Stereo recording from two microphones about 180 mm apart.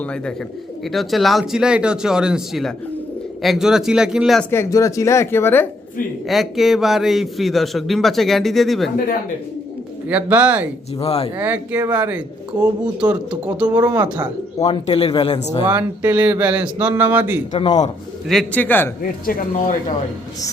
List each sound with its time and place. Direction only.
0.0 s a man's voice: 5° left (ahead or behind)
4.5 s speech: 20° left (ahead or behind)
6.2 s a man's voice: centre (ahead or behind)
10.1 s speech: 10° right (ahead or behind)
11.0 s speech: 35° left (ahead or behind)
11.3 s a man's voice: 10° right (ahead or behind)
13.7 s speech: 20° right (ahead or behind)
14.6 s speech: 35° left (ahead or behind)
15.6 s speech: 10° right (ahead or behind)
18.3 s speech: 5° left (ahead or behind)
19.2 s speech: 50° left (ahead or behind)